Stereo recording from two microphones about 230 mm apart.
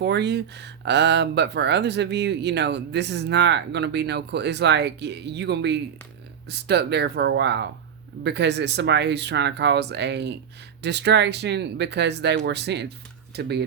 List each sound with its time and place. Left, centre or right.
0.0 s speech: right